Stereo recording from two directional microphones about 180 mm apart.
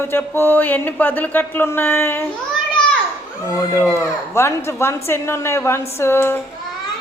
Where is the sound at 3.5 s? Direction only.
15° left (ahead or behind).